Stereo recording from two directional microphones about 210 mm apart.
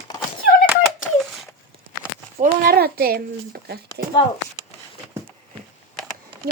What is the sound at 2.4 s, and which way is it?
A child's voice, 45° right (ahead or behind).